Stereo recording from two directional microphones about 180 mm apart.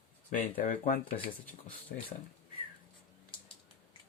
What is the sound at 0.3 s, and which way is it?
Speech, 50° left (ahead or behind).